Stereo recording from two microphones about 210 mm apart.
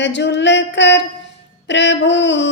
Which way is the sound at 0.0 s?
55° left (ahead or behind).